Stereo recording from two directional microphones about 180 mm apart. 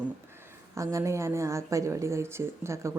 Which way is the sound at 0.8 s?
15° right (ahead or behind).